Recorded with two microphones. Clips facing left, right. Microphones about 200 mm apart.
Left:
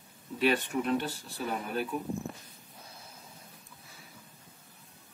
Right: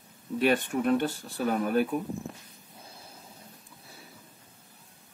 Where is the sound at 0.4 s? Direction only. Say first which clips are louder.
Right 3 dB; 50° right (ahead or behind).